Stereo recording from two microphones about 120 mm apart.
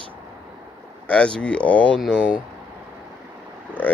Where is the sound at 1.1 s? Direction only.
10° left (ahead or behind).